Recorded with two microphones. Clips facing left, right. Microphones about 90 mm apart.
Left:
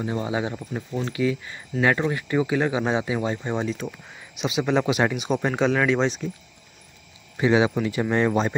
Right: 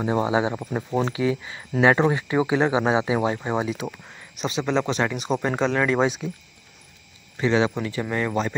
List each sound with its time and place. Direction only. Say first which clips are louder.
0.0 s speech: right 4 dB; 25° right (ahead or behind); by 3.9 s 10° right (ahead or behind)
4.6 s speech: left 2 dB; 10° left (ahead or behind); by 6.3 s 10° right (ahead or behind)
7.3 s speech: left 2 dB; 15° left (ahead or behind)